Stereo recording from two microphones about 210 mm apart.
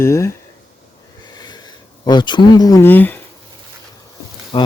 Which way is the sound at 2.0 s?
20° left (ahead or behind).